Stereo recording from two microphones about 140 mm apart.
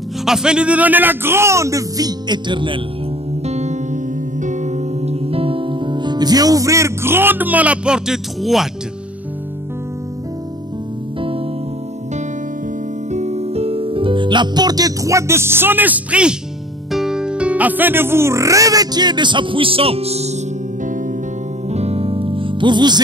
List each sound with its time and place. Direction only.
0.2 s a man's voice: 5° right (ahead or behind); by 2.8 s 35° right (ahead or behind)
3.4 s music: 55° right (ahead or behind); by 8.6 s centre (ahead or behind)
11.1 s music: 40° right (ahead or behind)
13.1 s speech: 50° right (ahead or behind)
21.6 s music: 50° right (ahead or behind); by 22.9 s 35° right (ahead or behind)